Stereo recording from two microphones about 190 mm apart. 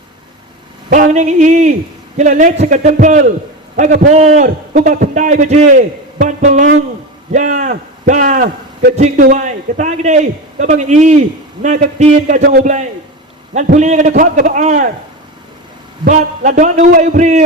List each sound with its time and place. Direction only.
0.9 s a man's voice: 40° right (ahead or behind)
16.0 s a man's voice: 40° right (ahead or behind)